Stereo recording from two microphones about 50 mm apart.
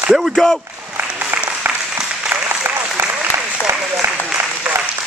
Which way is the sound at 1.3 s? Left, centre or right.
Right.